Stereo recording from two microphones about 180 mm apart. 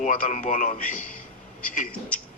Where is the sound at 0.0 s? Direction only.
45° left (ahead or behind).